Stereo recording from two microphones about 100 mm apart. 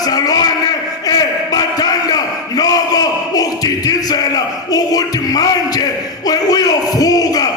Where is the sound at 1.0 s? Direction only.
40° left (ahead or behind).